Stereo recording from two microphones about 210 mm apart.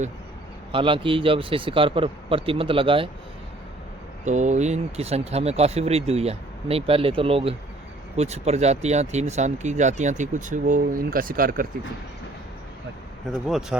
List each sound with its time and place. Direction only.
0.7 s speech: 25° right (ahead or behind)
4.3 s speech: 35° right (ahead or behind)
13.5 s speech: centre (ahead or behind)